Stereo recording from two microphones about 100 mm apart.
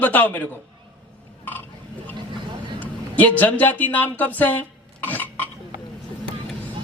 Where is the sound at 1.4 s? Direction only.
20° left (ahead or behind).